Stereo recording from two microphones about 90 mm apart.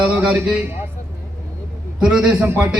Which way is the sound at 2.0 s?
10° right (ahead or behind).